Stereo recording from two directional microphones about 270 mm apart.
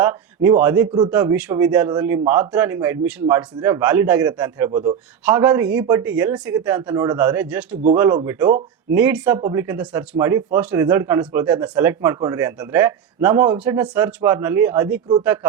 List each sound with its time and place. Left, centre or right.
0.0 s a sound: centre
0.6 s speech: centre
4.7 s a man's voice: centre